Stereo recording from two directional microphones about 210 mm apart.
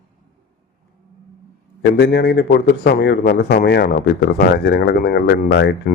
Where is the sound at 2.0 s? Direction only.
50° left (ahead or behind).